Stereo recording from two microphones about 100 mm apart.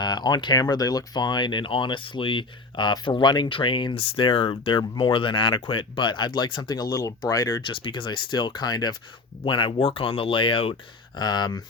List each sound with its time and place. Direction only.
0.0 s speech: 45° left (ahead or behind)
7.6 s speech: 55° left (ahead or behind)
9.4 s speech: 55° left (ahead or behind)
11.2 s speech: 45° left (ahead or behind)